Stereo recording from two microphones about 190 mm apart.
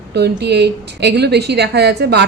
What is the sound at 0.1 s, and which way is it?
A woman's voice, 60° right (ahead or behind).